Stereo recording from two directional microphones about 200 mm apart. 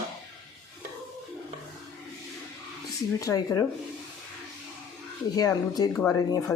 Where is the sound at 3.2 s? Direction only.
15° left (ahead or behind).